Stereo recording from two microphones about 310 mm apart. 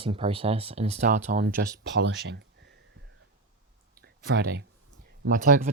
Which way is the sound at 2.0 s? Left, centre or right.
Right.